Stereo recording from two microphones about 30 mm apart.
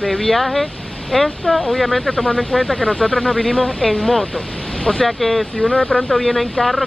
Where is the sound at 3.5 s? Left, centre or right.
Left.